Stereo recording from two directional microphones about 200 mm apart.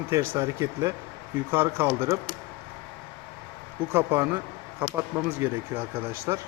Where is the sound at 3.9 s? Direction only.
10° right (ahead or behind).